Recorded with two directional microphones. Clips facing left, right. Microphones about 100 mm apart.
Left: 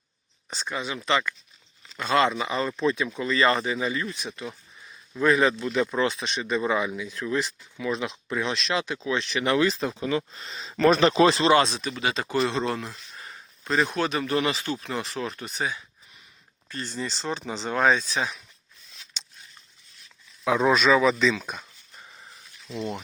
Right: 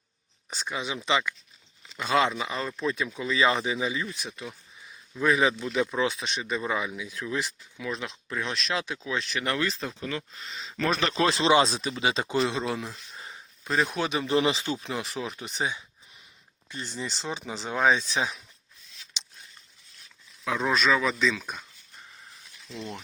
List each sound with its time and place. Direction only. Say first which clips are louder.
0.5 s speech: left 1 dB; 10° right (ahead or behind)
7.8 s speech: left 5 dB; centre (ahead or behind)
10.0 s speech: left 8 dB; 20° left (ahead or behind)
10.3 s speech: left 3 dB; 40° left (ahead or behind)
11.1 s speech: left 6 dB; 5° left (ahead or behind)
11.9 s speech: even; 25° right (ahead or behind)
12.4 s speech: left 2 dB; 5° right (ahead or behind)
13.9 s speech: even; 15° right (ahead or behind)
20.7 s speech: left 4 dB; 15° left (ahead or behind)